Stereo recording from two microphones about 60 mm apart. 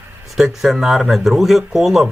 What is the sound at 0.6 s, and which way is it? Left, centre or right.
Speech, centre.